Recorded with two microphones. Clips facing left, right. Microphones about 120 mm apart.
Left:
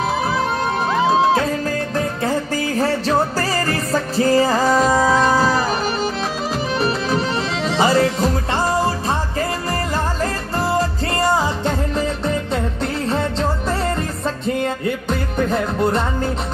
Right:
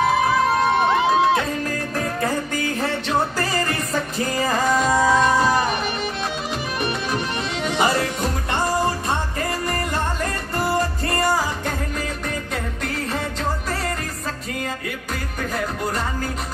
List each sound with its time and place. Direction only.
2.8 s music: 35° left (ahead or behind)
6.8 s music: 30° left (ahead or behind)
10.2 s music: 30° left (ahead or behind)
13.1 s music: 30° left (ahead or behind)
15.3 s music: 25° left (ahead or behind)